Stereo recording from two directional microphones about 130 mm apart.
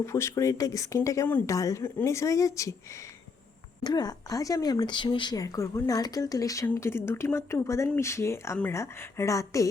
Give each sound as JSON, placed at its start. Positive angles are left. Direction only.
{"t": 0.0, "sound": "speech", "side_deg": 20}
{"t": 3.8, "sound": "speech", "side_deg": 30}